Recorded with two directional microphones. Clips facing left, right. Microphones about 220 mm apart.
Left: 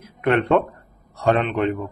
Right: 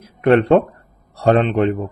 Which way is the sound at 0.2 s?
35° right (ahead or behind).